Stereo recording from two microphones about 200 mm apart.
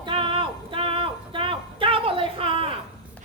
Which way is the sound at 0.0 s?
25° right (ahead or behind).